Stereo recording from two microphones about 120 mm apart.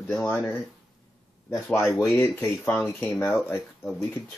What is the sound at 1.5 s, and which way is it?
Speech, 25° left (ahead or behind).